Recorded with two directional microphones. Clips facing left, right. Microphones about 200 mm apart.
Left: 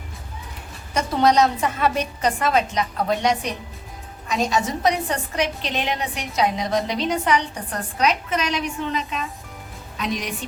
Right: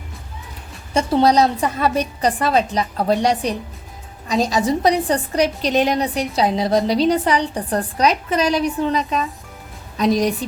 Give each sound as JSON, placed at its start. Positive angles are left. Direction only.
{"t": 0.9, "sound": "a woman's voice", "side_deg": -35}